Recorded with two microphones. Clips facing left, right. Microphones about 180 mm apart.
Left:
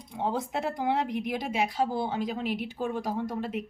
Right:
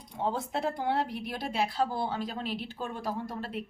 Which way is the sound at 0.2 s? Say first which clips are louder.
Left 1 dB; 15° left (ahead or behind).